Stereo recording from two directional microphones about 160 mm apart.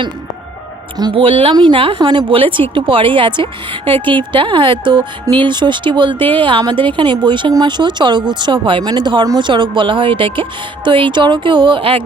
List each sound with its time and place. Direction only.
0.9 s speech: 30° right (ahead or behind)